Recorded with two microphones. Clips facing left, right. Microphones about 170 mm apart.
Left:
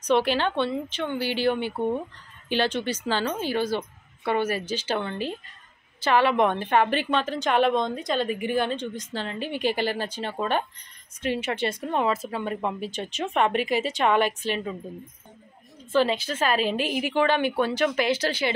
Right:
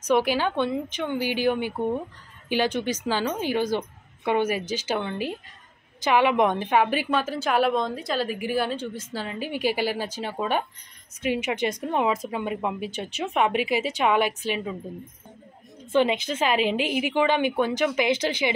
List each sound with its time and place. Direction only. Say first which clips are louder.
0.1 s a woman's voice: even; 10° right (ahead or behind)
15.9 s a woman's voice: right 1 dB; 20° right (ahead or behind)